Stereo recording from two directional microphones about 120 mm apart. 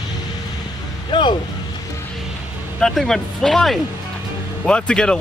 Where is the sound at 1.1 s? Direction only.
40° left (ahead or behind).